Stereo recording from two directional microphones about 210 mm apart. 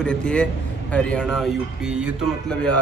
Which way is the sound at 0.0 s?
5° left (ahead or behind).